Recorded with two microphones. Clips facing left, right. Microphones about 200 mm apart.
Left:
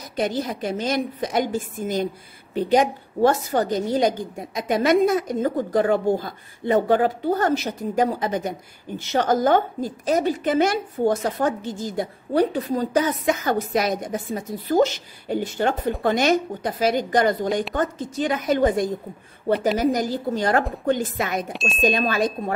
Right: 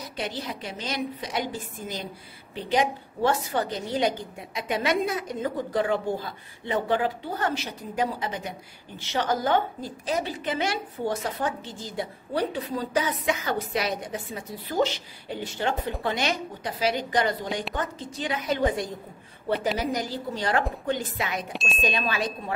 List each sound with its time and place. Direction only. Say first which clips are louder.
0.1 s a woman's voice: left 10 dB; 45° left (ahead or behind)
21.5 s speech: left 5 dB; centre (ahead or behind)
21.8 s a woman's voice: left 7 dB; 45° left (ahead or behind)